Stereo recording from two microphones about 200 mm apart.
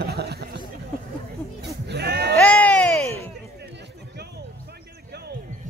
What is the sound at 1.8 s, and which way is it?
Sheep, 55° right (ahead or behind).